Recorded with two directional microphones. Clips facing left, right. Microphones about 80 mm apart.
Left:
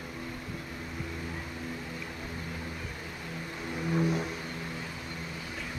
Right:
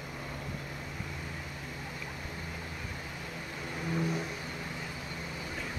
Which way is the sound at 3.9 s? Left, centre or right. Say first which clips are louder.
Left 4 dB; centre.